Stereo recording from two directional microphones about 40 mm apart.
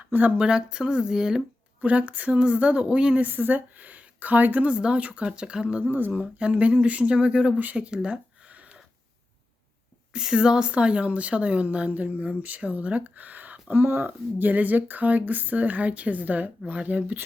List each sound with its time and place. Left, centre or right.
0.1 s speech: right
0.3 s speech: right
1.8 s speech: right
3.5 s speech: right
4.7 s speech: right
5.8 s speech: right
6.5 s speech: right
7.5 s speech: right
7.8 s speech: right
10.1 s speech: centre; by 13.7 s right
13.7 s speech: right
14.1 s speech: right